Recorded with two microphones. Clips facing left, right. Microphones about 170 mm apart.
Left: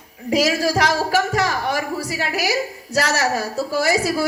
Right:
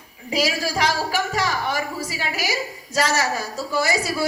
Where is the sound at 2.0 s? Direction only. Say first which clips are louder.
Left 4 dB; 70° left (ahead or behind).